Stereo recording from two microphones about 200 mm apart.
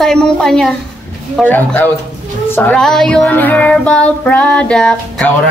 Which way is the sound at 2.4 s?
10° left (ahead or behind).